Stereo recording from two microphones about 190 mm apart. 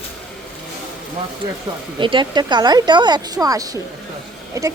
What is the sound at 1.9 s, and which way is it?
Speech, 25° right (ahead or behind).